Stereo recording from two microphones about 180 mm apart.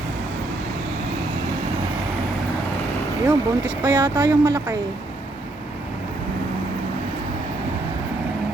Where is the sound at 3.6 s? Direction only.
15° right (ahead or behind).